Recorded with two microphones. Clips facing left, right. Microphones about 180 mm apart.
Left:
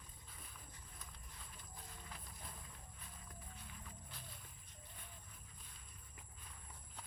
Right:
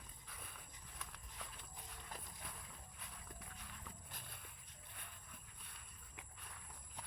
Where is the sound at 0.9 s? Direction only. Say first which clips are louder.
Right 8 dB; 80° right.